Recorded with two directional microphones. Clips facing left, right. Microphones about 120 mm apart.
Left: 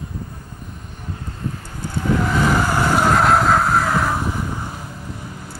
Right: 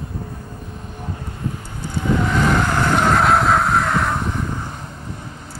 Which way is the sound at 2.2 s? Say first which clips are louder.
Even; 5° left (ahead or behind).